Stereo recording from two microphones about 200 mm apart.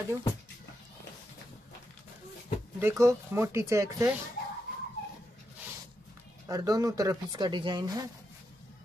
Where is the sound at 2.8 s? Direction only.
15° right (ahead or behind).